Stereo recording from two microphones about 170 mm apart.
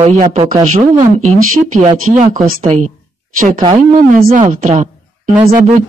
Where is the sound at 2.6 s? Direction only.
40° right (ahead or behind).